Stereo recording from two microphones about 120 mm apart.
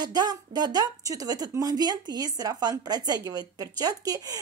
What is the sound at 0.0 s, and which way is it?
Speech, 35° right (ahead or behind).